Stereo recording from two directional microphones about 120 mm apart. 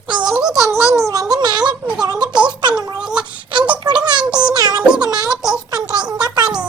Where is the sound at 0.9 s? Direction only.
30° right (ahead or behind).